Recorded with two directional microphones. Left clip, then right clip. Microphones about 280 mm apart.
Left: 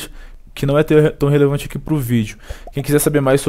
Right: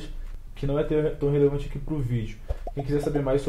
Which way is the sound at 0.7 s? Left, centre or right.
Left.